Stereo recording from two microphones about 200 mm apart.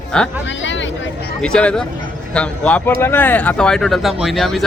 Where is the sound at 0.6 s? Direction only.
65° left (ahead or behind).